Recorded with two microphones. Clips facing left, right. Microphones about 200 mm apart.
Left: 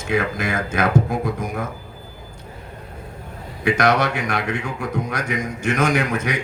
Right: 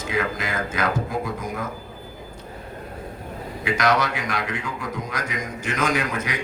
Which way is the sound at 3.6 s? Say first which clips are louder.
Left 4 dB; 55° left (ahead or behind).